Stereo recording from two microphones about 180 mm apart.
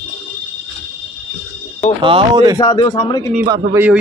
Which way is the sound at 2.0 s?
25° right (ahead or behind).